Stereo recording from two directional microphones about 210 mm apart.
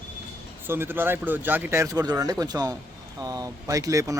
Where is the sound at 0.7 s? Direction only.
10° right (ahead or behind).